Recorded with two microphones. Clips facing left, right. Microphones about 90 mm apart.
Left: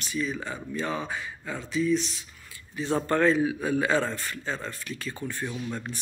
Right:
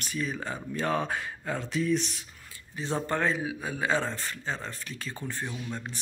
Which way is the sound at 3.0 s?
15° right (ahead or behind).